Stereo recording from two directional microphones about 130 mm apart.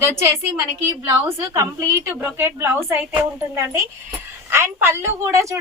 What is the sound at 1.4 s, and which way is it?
A woman's voice, 20° right (ahead or behind).